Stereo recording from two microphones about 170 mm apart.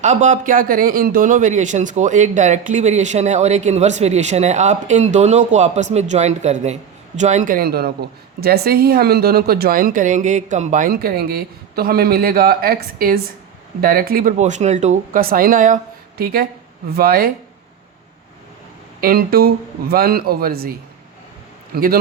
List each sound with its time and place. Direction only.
0.0 s speech: 45° right (ahead or behind)
15.2 s a woman's voice: 60° right (ahead or behind)
18.9 s speech: 60° right (ahead or behind)